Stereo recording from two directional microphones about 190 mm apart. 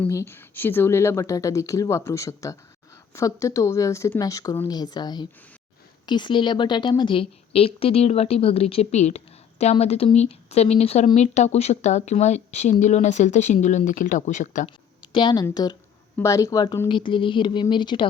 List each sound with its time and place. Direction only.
0.0 s a woman's voice: 15° left (ahead or behind); by 14.7 s 40° left (ahead or behind)
14.7 s a sound: 25° left (ahead or behind)
15.4 s a woman's voice: 20° left (ahead or behind)